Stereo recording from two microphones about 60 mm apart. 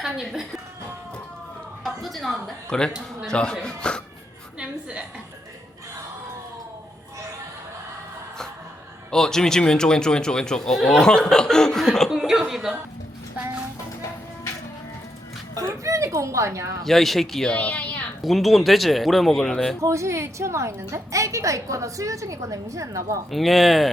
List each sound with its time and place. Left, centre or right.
0.0 s a woman's voice: centre
1.8 s speech: centre
2.6 s a man's voice: centre
4.6 s a woman's voice: right
9.0 s a man's voice: centre
12.1 s chuckle: centre
15.5 s a sound: right
16.8 s speech: centre
17.5 s a sound: left
18.2 s speech: centre
19.8 s a woman's voice: right
23.3 s speech: centre